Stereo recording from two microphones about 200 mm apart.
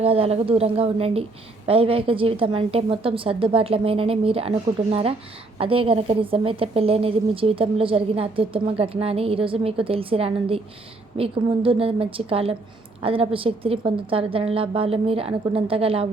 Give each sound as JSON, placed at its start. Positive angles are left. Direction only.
{"t": 0.0, "sound": "a woman's voice", "side_deg": -30}